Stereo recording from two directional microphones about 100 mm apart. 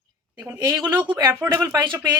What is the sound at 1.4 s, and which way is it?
Speech, 25° right (ahead or behind).